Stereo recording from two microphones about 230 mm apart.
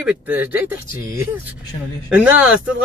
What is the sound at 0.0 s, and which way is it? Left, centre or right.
Speech, centre.